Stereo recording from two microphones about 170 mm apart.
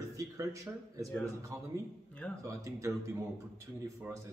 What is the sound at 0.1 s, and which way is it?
Speech, 20° right (ahead or behind).